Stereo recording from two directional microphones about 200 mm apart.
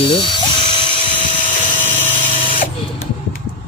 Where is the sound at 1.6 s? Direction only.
25° left (ahead or behind).